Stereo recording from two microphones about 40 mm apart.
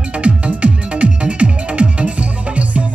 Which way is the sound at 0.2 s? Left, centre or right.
Right.